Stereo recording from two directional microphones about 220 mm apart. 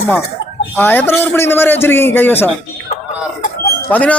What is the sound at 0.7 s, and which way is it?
A man's voice, 10° left (ahead or behind).